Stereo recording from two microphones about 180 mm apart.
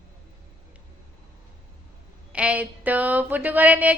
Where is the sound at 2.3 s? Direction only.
5° right (ahead or behind).